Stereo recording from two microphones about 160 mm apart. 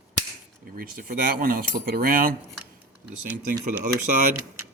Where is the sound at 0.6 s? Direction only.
65° right (ahead or behind).